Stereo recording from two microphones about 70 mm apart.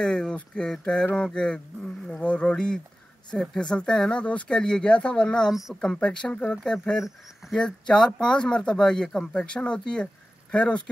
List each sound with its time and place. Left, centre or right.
0.0 s speech: centre
7.0 s speech: centre
7.5 s speech: centre